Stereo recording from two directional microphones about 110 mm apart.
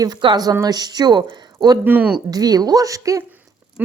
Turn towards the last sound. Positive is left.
turn(degrees=-15)  # may be behind; listen again after turning